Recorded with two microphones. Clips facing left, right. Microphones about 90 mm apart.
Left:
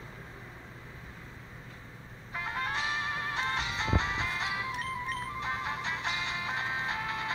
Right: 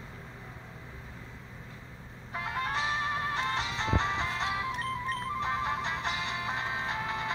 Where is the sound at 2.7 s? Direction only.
40° right (ahead or behind).